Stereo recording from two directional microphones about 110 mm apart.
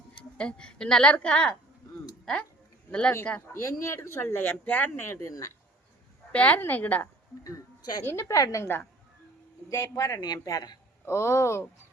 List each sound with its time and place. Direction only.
0.3 s a woman's voice: 10° left (ahead or behind)
3.4 s speech: 25° left (ahead or behind)
6.3 s a woman's voice: 15° left (ahead or behind)
7.4 s a man's voice: 35° left (ahead or behind)
11.0 s speech: 25° left (ahead or behind)